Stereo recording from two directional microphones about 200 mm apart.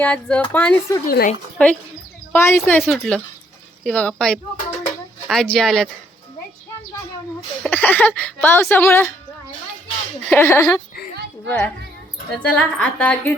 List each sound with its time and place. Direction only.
0.0 s a woman's voice: 5° left (ahead or behind)
1.0 s a woman's voice: 45° left (ahead or behind)
1.6 s a woman's voice: 5° left (ahead or behind)
4.9 s music: 5° left (ahead or behind)
7.6 s a woman's voice: 10° left (ahead or behind)
10.2 s a woman's voice: 10° left (ahead or behind)